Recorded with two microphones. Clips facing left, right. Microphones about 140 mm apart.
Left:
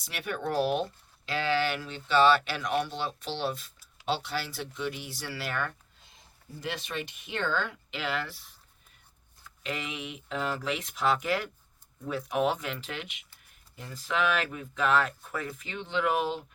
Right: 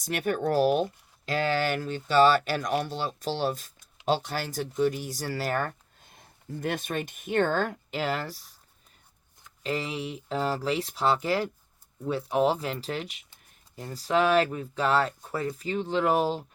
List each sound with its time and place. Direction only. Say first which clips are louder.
0.0 s speech: right 7 dB; 45° right (ahead or behind)
9.6 s speech: right 5 dB; 35° right (ahead or behind)